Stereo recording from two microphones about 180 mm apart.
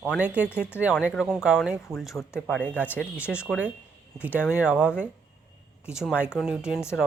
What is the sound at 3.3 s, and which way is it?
Speech, 5° right (ahead or behind).